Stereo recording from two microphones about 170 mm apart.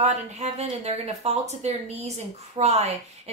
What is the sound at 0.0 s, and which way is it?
A woman's voice, 40° right (ahead or behind).